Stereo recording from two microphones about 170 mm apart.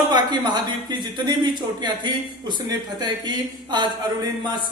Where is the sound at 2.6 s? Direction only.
25° right (ahead or behind).